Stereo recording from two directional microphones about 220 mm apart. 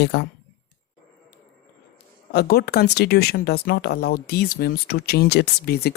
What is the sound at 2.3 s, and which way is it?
Speech, 45° left (ahead or behind).